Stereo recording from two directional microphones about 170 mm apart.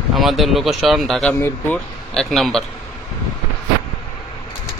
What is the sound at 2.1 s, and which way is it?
Speech, centre (ahead or behind).